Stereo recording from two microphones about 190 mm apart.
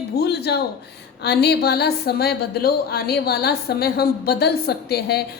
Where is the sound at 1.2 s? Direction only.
60° left (ahead or behind).